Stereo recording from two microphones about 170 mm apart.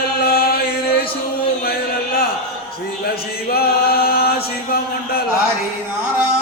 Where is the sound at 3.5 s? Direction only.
65° left (ahead or behind).